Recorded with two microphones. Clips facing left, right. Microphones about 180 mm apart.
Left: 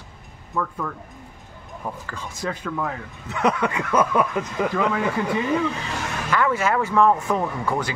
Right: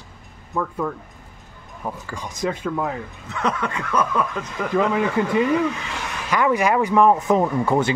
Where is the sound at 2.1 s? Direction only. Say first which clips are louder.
Right 6 dB; 20° right (ahead or behind).